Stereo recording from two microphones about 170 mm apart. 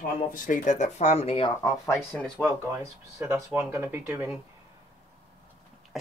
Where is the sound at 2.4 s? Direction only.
15° right (ahead or behind).